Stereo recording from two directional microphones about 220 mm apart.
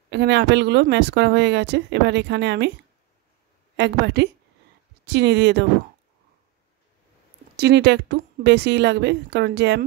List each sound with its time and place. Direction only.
0.1 s speech: 50° right (ahead or behind)
3.7 s speech: 50° right (ahead or behind)
7.5 s speech: 50° right (ahead or behind)